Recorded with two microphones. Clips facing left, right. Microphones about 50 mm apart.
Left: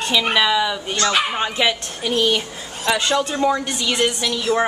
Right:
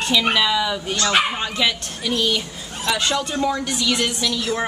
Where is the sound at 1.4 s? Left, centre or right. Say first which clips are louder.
Left 2 dB; left.